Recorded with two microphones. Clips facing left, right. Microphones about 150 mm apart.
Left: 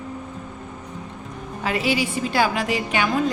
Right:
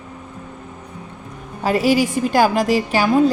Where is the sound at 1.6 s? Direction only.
40° right (ahead or behind).